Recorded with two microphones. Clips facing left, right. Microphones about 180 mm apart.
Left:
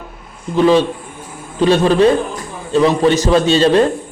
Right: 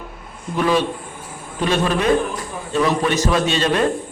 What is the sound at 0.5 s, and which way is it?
A man's voice, 30° left (ahead or behind).